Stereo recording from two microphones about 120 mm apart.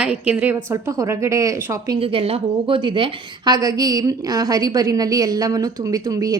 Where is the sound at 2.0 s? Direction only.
50° right (ahead or behind).